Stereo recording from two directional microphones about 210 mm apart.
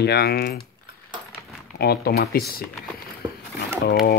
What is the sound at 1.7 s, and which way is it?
Speech, 50° left (ahead or behind).